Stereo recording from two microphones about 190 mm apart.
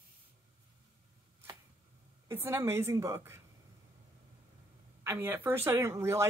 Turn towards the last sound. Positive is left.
turn(degrees=-15)  # may be behind; listen again after turning